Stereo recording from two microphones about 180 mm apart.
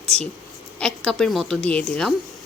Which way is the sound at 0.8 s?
5° left (ahead or behind).